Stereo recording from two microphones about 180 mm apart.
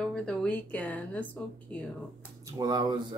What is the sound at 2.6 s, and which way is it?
Speech, 25° right (ahead or behind).